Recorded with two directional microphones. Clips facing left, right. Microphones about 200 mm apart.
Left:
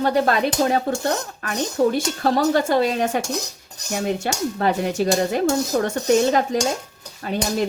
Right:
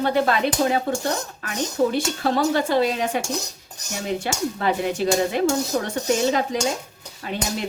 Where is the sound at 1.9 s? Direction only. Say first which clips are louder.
Left 2 dB; 45° left (ahead or behind).